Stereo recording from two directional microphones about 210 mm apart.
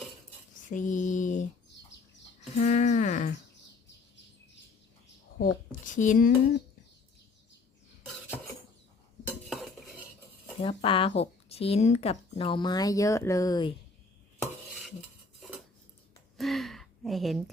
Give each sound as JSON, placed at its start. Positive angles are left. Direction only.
{"t": 0.7, "sound": "mantra", "side_deg": 35}
{"t": 2.4, "sound": "a sound", "side_deg": 35}
{"t": 5.8, "sound": "mantra", "side_deg": 35}
{"t": 9.2, "sound": "cutlery", "side_deg": 0}
{"t": 10.6, "sound": "speech", "side_deg": 25}
{"t": 16.4, "sound": "a sound", "side_deg": 0}